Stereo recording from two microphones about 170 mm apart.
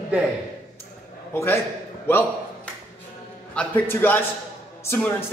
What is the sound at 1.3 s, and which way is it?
Speech, 15° left (ahead or behind).